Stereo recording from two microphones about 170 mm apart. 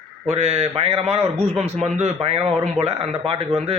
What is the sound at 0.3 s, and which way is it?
Speech, 40° right (ahead or behind).